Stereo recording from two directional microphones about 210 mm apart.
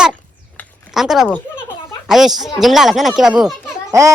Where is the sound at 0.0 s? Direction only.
Centre (ahead or behind).